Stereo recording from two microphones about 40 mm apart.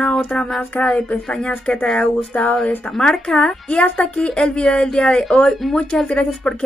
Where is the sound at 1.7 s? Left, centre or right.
Left.